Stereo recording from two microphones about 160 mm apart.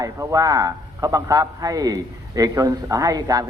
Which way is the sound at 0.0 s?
20° right (ahead or behind).